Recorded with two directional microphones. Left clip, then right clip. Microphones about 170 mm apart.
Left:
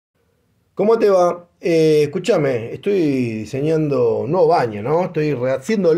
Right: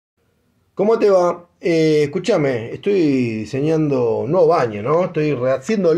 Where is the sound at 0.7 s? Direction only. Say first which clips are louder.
Even; 10° left (ahead or behind).